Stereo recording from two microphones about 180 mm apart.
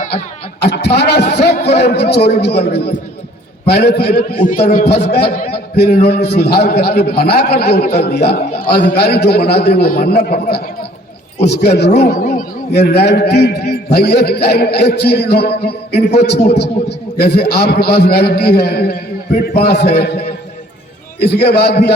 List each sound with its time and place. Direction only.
0.6 s a man's voice: 65° left (ahead or behind); by 4.9 s 45° left (ahead or behind)
4.9 s a man's voice: 65° left (ahead or behind)
12.0 s a man's voice: 40° left (ahead or behind)
12.7 s a man's voice: 65° left (ahead or behind)
21.2 s a man's voice: 65° left (ahead or behind)